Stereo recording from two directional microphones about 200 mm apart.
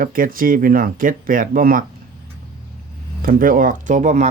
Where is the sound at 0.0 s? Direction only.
45° right (ahead or behind).